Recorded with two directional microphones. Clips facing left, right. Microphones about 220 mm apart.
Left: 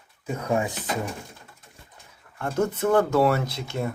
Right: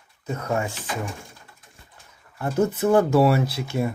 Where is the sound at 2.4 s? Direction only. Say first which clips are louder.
Right 3 dB; 10° right (ahead or behind).